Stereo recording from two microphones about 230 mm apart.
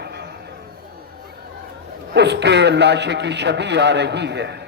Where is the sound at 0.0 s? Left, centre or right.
Right.